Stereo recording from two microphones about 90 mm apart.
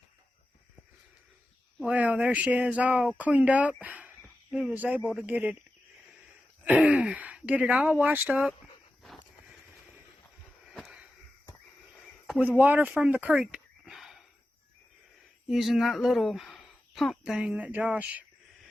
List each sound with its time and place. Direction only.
1.9 s speech: 15° right (ahead or behind)
6.7 s speech: 15° right (ahead or behind)
12.4 s speech: 20° right (ahead or behind)
15.4 s speech: centre (ahead or behind)
17.3 s speech: 10° right (ahead or behind)